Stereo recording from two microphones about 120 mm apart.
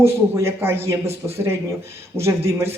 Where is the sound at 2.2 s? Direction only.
25° right (ahead or behind).